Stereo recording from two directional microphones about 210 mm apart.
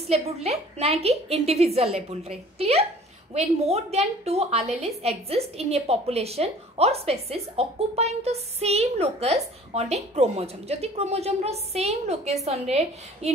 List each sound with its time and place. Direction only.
0.1 s a woman's voice: 30° right (ahead or behind)